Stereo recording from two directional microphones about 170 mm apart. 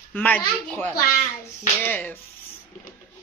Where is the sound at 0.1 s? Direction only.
10° left (ahead or behind).